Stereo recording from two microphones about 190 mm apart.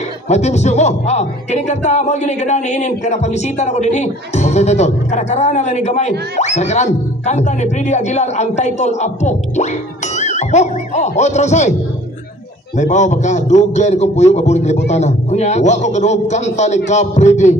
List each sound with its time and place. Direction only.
0.3 s speech: 35° left (ahead or behind)
12.7 s speech: 40° left (ahead or behind)